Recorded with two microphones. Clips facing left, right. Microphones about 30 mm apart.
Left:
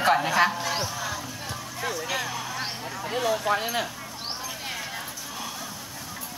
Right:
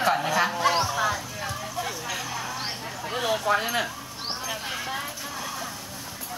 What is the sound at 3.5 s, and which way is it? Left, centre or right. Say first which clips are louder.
Speech: right 1 dB; centre.